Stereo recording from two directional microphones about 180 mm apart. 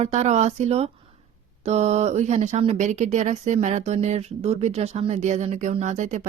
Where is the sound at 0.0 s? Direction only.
40° right (ahead or behind).